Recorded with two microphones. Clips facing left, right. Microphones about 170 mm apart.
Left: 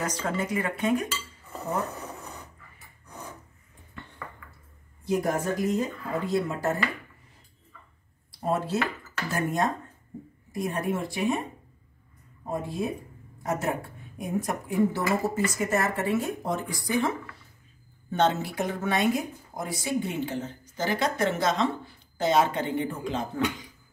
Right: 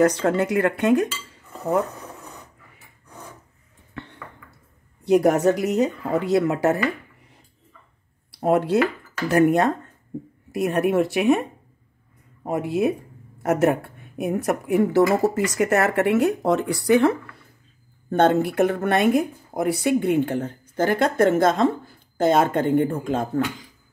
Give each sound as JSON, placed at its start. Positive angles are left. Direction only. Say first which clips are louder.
{"t": 0.0, "sound": "speech", "louder": "right 11 dB", "side_deg": -65}
{"t": 3.9, "sound": "ping", "louder": "right 8 dB", "side_deg": -75}
{"t": 5.0, "sound": "speech", "louder": "right 10 dB", "side_deg": -75}
{"t": 8.3, "sound": "speech", "louder": "right 8 dB", "side_deg": -70}
{"t": 12.4, "sound": "speech", "louder": "right 8 dB", "side_deg": -75}
{"t": 18.1, "sound": "speech", "louder": "right 7 dB", "side_deg": -55}